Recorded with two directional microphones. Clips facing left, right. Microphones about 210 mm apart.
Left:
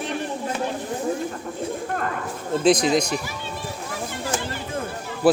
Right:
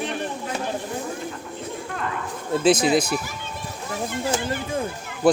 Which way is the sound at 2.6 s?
5° right (ahead or behind).